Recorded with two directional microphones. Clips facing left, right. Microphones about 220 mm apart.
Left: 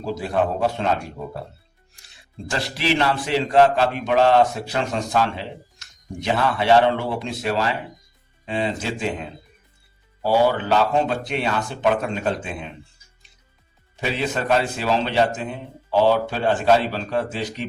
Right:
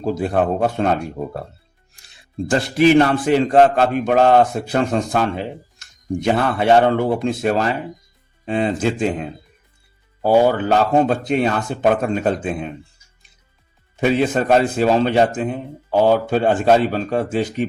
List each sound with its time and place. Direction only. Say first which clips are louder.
0.0 s speech: right 4 dB; 50° right (ahead or behind)
2.5 s speech: right 10 dB; 50° right (ahead or behind)
10.2 s speech: right 4 dB; 45° right (ahead or behind)
13.9 s speech: right 8 dB; 50° right (ahead or behind)